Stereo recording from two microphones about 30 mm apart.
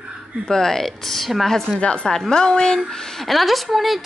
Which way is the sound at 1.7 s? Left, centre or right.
Centre.